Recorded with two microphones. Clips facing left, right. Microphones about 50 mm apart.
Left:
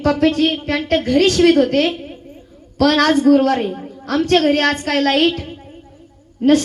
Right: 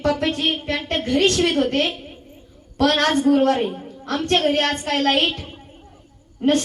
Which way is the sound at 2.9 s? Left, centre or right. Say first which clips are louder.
Left 5 dB; centre.